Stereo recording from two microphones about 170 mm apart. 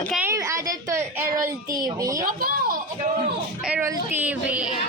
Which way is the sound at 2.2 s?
60° right (ahead or behind).